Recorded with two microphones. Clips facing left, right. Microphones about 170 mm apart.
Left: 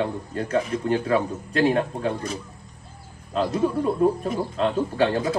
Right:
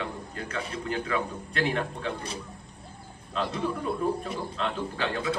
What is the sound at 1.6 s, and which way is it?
Speech, 40° left (ahead or behind).